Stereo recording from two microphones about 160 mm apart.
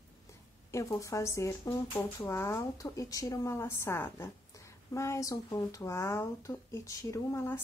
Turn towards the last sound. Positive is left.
turn(degrees=15)  # may be behind; listen again after turning